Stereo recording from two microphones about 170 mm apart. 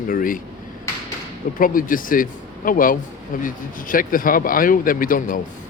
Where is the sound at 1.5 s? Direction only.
55° left (ahead or behind).